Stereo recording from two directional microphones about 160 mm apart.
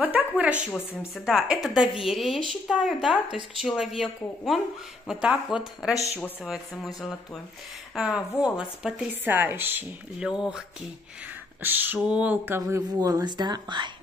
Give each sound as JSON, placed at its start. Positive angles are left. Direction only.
{"t": 0.0, "sound": "a woman's voice", "side_deg": -10}
{"t": 7.9, "sound": "a woman's voice", "side_deg": -5}
{"t": 11.6, "sound": "speech", "side_deg": -10}